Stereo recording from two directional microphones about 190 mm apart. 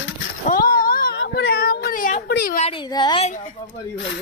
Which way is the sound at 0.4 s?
45° left (ahead or behind).